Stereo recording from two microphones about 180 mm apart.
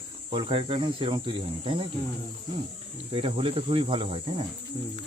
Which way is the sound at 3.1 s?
30° right (ahead or behind).